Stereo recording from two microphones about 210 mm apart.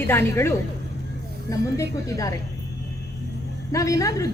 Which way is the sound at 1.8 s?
15° left (ahead or behind).